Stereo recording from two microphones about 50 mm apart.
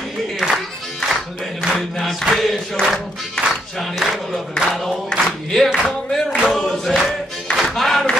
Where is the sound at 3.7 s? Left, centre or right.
Centre.